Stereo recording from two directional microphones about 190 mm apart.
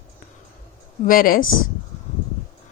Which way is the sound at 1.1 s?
50° left (ahead or behind).